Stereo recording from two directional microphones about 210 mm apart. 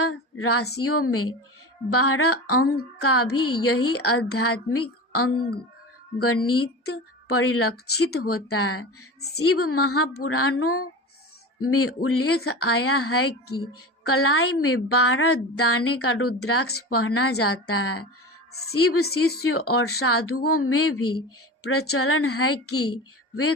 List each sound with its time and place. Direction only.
0.0 s female singing: 90° left
0.8 s a woman's voice: 90° left
19.0 s speech: 50° left (ahead or behind)
19.4 s a woman's voice: 90° left